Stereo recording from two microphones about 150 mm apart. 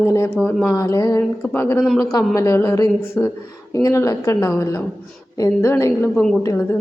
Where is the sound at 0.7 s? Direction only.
20° left (ahead or behind).